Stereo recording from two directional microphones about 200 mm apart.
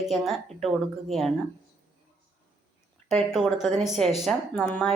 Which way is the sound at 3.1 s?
Centre (ahead or behind).